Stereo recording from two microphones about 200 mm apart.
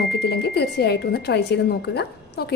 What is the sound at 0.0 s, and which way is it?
A woman's voice, 55° left (ahead or behind).